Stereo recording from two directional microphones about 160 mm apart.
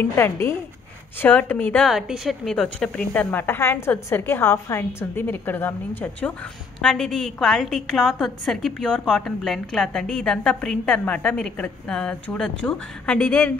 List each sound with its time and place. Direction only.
0.1 s a woman's voice: 15° left (ahead or behind)
1.9 s a woman's voice: centre (ahead or behind)
6.8 s a woman's voice: 5° left (ahead or behind)